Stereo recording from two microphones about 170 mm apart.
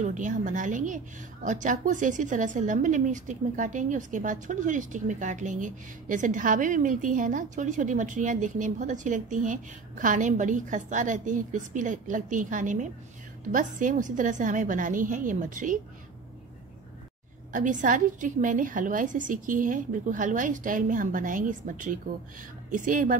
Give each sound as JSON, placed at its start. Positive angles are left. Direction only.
{"t": 0.0, "sound": "a woman's voice", "side_deg": -45}
{"t": 17.5, "sound": "a woman's voice", "side_deg": -50}